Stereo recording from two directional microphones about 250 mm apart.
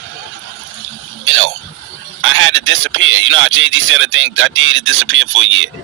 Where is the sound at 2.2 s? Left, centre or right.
Right.